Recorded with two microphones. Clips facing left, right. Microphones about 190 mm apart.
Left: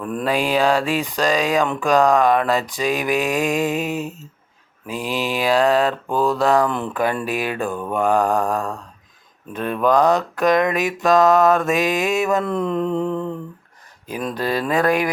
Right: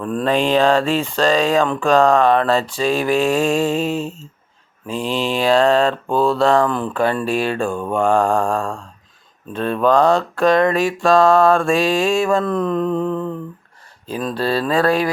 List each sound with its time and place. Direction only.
0.2 s speech: 15° left (ahead or behind)
7.7 s mantra: 15° right (ahead or behind)
7.9 s speech: 15° left (ahead or behind)